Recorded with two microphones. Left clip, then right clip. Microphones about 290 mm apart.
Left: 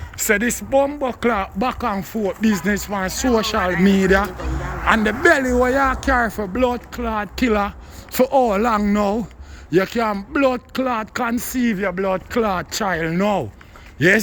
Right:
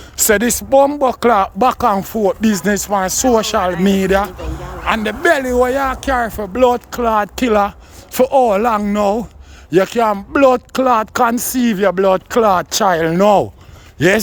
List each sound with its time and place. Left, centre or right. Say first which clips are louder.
0.2 s speech: right 5 dB; centre